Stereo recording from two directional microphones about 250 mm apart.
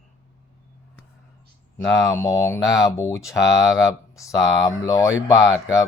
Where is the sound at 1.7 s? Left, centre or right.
Centre.